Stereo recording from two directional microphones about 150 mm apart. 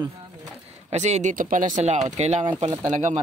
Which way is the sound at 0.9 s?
50° right (ahead or behind).